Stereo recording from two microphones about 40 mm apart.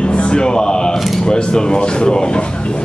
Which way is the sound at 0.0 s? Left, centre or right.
Left.